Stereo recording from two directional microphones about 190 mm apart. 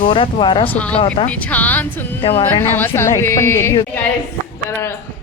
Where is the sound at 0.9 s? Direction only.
30° left (ahead or behind).